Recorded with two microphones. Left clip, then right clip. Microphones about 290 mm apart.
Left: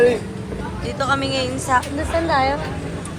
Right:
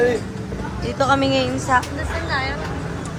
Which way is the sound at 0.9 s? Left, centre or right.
Centre.